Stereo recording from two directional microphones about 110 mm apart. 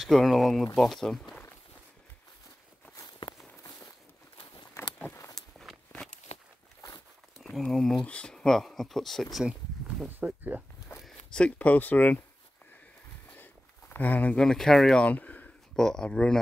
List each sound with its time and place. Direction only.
0.0 s speech: centre (ahead or behind)
3.0 s walk: 40° left (ahead or behind)
4.4 s a sound: 45° left (ahead or behind)
5.3 s walk: centre (ahead or behind)
7.4 s speech: centre (ahead or behind); by 10.6 s 15° right (ahead or behind)
11.0 s speech: 5° left (ahead or behind)
13.3 s speech: 15° left (ahead or behind)